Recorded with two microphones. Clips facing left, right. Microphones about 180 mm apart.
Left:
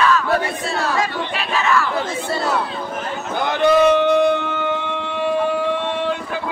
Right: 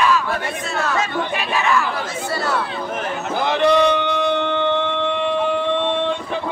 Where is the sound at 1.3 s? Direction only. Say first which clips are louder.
Left 1 dB; 15° right (ahead or behind).